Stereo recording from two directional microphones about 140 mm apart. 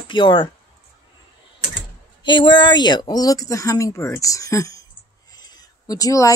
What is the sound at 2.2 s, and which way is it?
A woman's voice, 35° left (ahead or behind).